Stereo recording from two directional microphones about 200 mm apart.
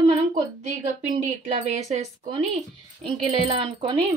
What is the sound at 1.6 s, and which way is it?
Speech, 35° right (ahead or behind).